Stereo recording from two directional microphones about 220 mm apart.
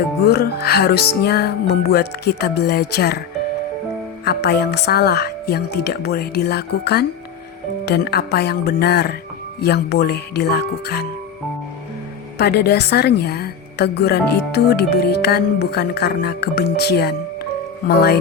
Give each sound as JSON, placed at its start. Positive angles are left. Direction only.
{"t": 0.3, "sound": "a woman's voice", "side_deg": 45}
{"t": 4.3, "sound": "a woman's voice", "side_deg": 45}
{"t": 12.4, "sound": "a woman's voice", "side_deg": 45}